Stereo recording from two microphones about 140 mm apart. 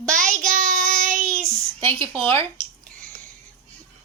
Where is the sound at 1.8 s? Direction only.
35° right (ahead or behind).